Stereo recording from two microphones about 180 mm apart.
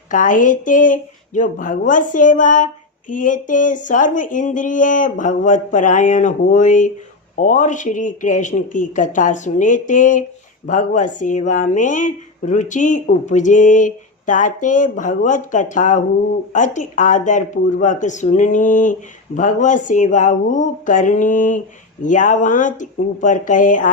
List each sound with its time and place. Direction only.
0.1 s speech: 45° left (ahead or behind)